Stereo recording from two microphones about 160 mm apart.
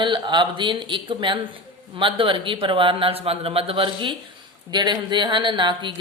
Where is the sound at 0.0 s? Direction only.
30° right (ahead or behind).